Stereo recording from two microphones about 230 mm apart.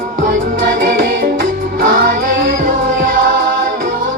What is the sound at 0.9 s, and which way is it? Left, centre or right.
Music, right.